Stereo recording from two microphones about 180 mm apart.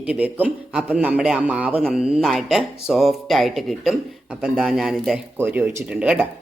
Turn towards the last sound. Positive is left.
turn(degrees=-5)  # may be behind; listen again after turning